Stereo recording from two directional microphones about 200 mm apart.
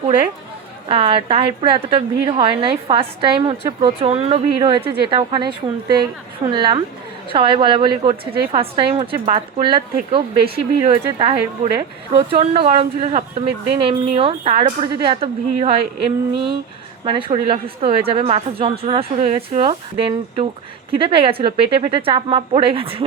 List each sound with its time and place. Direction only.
0.9 s a woman's voice: 25° right (ahead or behind)
17.1 s a woman's voice: 25° right (ahead or behind)